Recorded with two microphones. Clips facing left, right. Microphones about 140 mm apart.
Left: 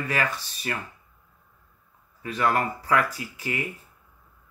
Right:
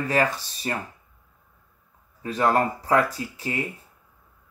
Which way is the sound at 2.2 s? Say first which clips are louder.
Right 3 dB; 35° right (ahead or behind).